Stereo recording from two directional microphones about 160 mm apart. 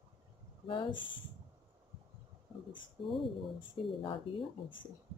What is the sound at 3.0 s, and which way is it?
Speech, 30° left (ahead or behind).